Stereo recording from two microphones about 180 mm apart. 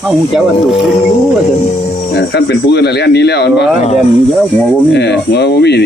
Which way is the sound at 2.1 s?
70° left (ahead or behind).